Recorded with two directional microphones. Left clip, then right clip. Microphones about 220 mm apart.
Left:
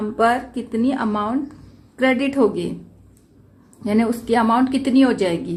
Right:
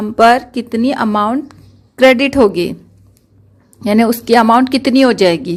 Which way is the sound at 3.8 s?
40° right (ahead or behind).